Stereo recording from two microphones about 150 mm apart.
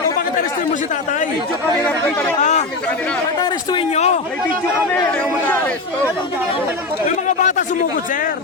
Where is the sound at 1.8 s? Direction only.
10° left (ahead or behind).